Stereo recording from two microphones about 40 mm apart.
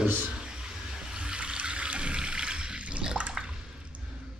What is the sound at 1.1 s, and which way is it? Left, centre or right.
Toilet flush, right.